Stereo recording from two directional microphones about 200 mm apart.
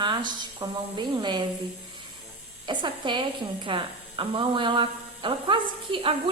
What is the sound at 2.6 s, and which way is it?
Speech, 25° right (ahead or behind).